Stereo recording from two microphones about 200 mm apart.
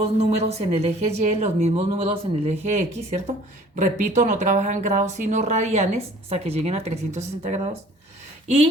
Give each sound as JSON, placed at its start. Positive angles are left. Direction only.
{"t": 0.2, "sound": "speech", "side_deg": -30}